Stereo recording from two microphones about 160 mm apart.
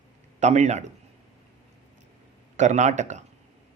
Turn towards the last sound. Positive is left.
turn(degrees=-50)  # may be behind; listen again after turning